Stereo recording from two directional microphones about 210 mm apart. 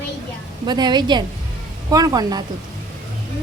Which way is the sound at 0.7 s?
20° right (ahead or behind).